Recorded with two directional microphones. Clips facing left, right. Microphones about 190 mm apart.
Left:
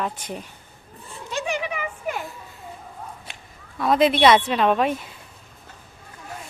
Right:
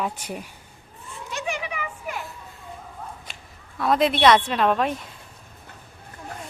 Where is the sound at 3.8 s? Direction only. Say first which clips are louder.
Left 2 dB; centre (ahead or behind).